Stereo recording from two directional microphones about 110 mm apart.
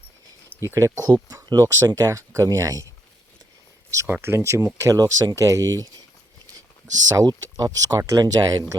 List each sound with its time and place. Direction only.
0.6 s speech: 25° right (ahead or behind)
4.1 s speech: 20° right (ahead or behind)
7.1 s speech: 35° right (ahead or behind)